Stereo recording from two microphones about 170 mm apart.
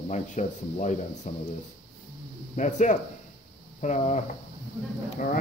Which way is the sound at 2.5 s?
45° left (ahead or behind).